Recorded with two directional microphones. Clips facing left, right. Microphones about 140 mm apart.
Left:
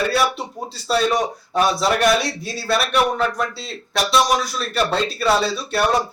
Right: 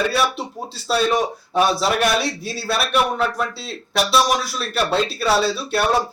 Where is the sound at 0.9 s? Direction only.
Centre (ahead or behind).